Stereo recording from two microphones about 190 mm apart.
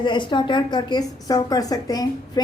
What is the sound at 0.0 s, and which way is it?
A woman's voice, 25° left (ahead or behind).